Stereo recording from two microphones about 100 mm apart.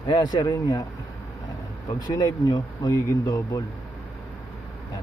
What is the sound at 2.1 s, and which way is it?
Speech, 40° left (ahead or behind).